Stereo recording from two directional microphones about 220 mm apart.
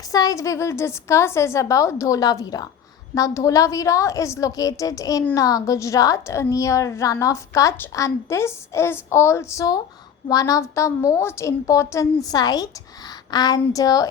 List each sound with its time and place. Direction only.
0.1 s a woman's voice: 15° left (ahead or behind)